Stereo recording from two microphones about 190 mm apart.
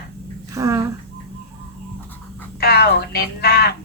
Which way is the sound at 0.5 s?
15° right (ahead or behind).